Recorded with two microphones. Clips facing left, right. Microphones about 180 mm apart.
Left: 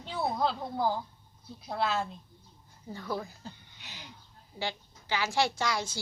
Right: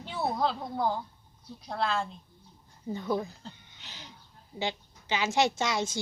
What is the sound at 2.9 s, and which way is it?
Speech, 20° right (ahead or behind).